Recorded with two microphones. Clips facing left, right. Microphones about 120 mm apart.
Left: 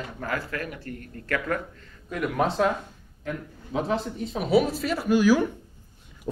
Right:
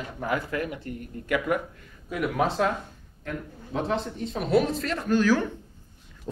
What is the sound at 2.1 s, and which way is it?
Speech, 5° right (ahead or behind).